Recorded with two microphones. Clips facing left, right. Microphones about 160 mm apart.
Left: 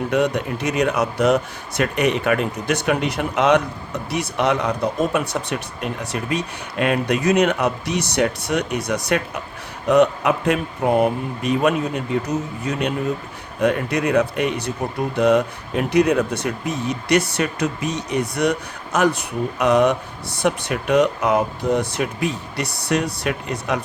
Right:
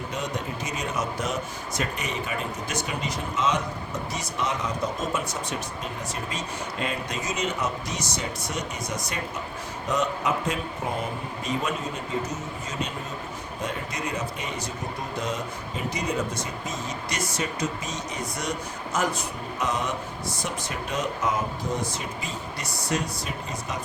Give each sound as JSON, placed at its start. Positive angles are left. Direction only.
{"t": 0.1, "sound": "speech", "side_deg": 65}